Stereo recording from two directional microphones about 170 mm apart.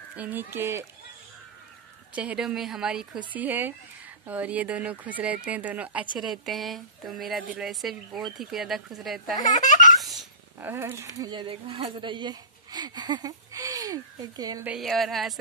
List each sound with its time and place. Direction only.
0.1 s speech: 10° right (ahead or behind)
2.1 s speech: 5° right (ahead or behind)
9.6 s baby laughter: 45° left (ahead or behind)
10.6 s speech: 15° right (ahead or behind)
11.1 s speech: 25° right (ahead or behind)
14.6 s speech: 5° right (ahead or behind)